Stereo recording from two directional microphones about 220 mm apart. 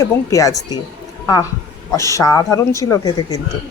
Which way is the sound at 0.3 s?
15° left (ahead or behind).